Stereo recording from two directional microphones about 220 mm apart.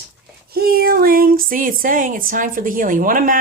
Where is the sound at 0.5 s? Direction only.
45° right (ahead or behind).